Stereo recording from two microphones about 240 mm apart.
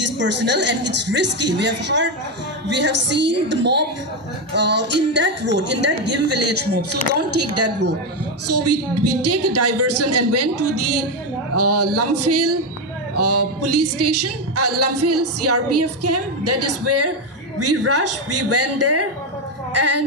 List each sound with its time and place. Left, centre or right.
0.0 s speech: right
7.2 s speech: right
19.7 s female singing: right